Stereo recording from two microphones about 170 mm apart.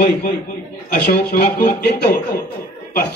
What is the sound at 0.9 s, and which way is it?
Speech, 65° left (ahead or behind).